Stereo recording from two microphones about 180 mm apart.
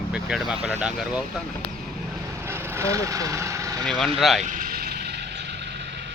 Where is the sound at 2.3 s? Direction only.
15° right (ahead or behind).